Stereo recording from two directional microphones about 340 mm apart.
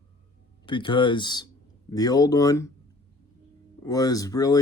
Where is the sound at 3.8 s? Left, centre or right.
Centre.